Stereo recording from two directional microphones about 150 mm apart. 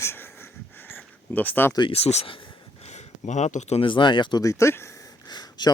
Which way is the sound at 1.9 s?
45° left (ahead or behind).